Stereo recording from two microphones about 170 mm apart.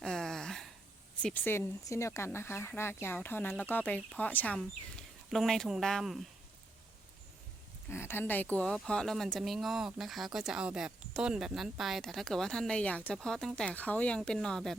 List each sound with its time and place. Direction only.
0.0 s a sound: 5° left (ahead or behind)
1.2 s speech: 10° left (ahead or behind)
7.9 s speech: 15° left (ahead or behind)